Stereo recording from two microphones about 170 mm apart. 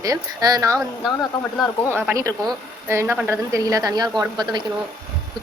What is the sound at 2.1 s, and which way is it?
A woman's voice, 20° right (ahead or behind).